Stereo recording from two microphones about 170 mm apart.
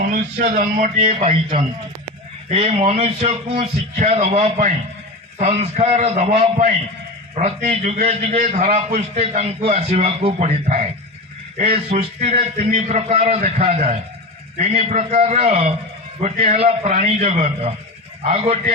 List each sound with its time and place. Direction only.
0.4 s a man's voice: 50° right (ahead or behind)
2.5 s a man's voice: 35° right (ahead or behind)